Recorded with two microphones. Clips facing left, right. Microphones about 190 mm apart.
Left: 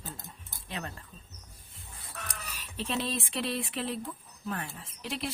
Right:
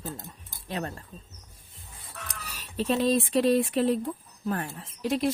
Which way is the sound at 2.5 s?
40° right (ahead or behind).